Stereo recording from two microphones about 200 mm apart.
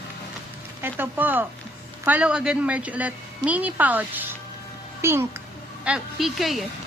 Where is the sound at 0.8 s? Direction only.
10° right (ahead or behind).